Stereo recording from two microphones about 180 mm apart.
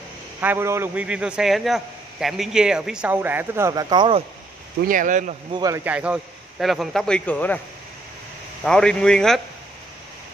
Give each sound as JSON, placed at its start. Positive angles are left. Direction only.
{"t": 0.4, "sound": "a man's voice", "side_deg": -10}
{"t": 4.8, "sound": "speech", "side_deg": -45}
{"t": 5.5, "sound": "speech", "side_deg": -20}
{"t": 5.9, "sound": "a man's voice", "side_deg": -5}
{"t": 8.6, "sound": "a man's voice", "side_deg": 5}